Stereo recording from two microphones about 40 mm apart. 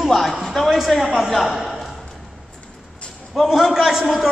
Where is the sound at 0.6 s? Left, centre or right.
Centre.